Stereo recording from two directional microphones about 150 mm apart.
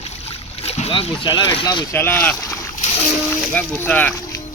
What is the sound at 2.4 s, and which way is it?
Splash, 20° left (ahead or behind).